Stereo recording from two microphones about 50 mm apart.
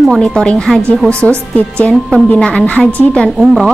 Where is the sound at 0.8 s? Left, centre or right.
Left.